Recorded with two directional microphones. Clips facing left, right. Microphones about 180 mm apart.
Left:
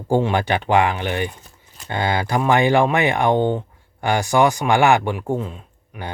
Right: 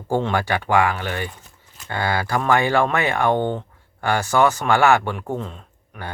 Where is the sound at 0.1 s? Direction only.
15° left (ahead or behind).